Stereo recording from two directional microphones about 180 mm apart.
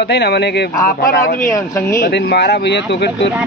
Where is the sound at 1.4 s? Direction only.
15° left (ahead or behind).